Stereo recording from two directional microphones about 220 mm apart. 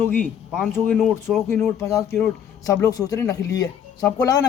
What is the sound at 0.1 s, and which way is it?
Speech, 5° left (ahead or behind).